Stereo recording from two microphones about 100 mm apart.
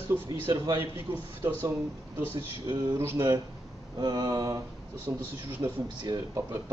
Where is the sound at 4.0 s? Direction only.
45° right (ahead or behind).